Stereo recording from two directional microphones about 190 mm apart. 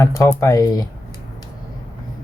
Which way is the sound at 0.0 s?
15° left (ahead or behind).